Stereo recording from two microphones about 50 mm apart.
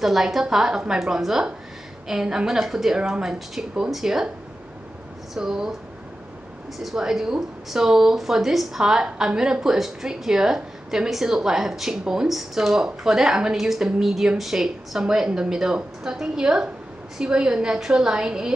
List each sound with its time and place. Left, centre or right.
0.0 s speech: centre
5.3 s speech: centre
6.8 s speech: centre
12.3 s speech: centre